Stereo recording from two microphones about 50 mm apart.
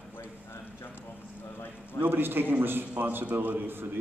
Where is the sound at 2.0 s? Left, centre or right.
Right.